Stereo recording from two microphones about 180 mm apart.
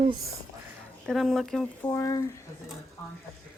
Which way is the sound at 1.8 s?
20° left (ahead or behind).